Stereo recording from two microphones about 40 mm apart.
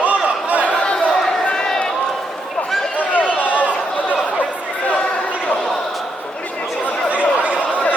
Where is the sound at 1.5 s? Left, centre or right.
Centre.